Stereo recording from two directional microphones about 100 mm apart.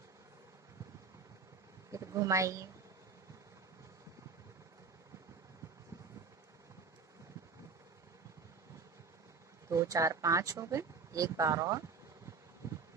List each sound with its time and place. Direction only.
1.9 s a woman's voice: 30° right (ahead or behind)
9.7 s speech: 30° right (ahead or behind)